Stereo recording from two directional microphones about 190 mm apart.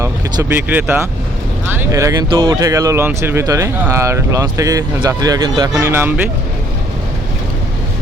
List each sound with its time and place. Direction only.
0.0 s speech: 15° right (ahead or behind)